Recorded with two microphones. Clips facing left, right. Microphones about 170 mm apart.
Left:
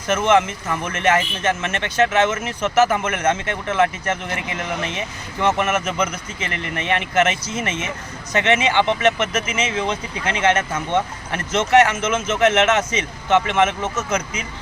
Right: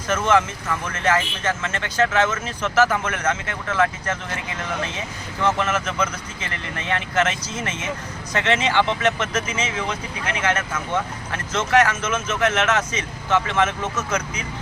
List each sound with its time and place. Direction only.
0.1 s speech: 20° left (ahead or behind)